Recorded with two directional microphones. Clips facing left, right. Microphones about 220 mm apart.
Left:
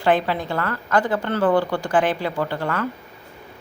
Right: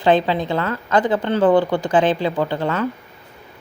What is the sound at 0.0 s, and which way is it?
Speech, 20° right (ahead or behind).